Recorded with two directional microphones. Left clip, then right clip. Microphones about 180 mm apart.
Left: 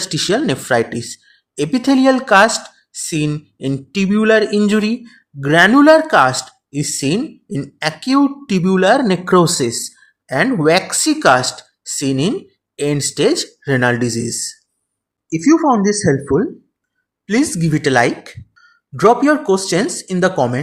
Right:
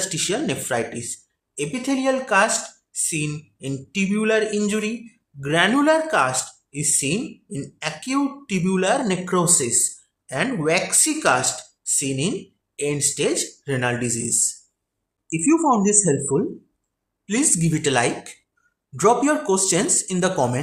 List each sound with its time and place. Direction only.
0.0 s speech: 40° left (ahead or behind)
15.3 s speech: 25° left (ahead or behind)